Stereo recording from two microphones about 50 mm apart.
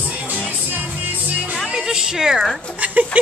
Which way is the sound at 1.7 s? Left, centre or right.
Centre.